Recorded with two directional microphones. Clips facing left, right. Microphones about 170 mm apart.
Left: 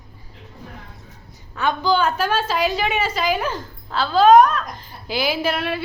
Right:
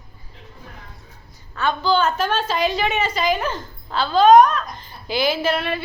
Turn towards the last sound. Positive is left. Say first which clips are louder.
# right 1 dB
turn(degrees=10)  # may be behind; listen again after turning